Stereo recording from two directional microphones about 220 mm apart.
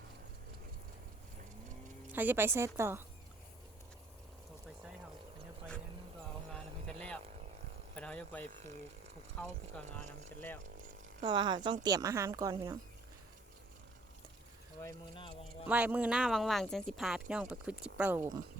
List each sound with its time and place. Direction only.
2.1 s speech: 10° right (ahead or behind)
6.5 s music: 5° left (ahead or behind)
7.9 s speech: 5° left (ahead or behind)
11.2 s speech: 20° right (ahead or behind)
15.1 s speech: 25° left (ahead or behind)
15.6 s speech: 5° right (ahead or behind)